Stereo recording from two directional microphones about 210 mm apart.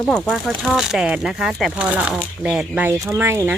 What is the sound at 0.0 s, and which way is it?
Speech, centre (ahead or behind).